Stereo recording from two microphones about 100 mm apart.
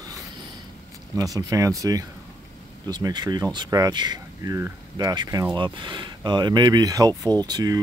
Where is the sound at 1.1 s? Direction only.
35° right (ahead or behind).